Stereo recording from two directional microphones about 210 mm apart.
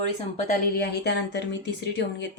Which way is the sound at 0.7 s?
50° left (ahead or behind).